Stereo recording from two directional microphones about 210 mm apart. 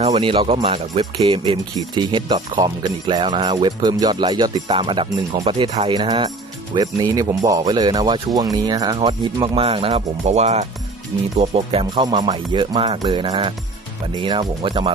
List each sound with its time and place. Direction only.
0.0 s speech: 30° right (ahead or behind)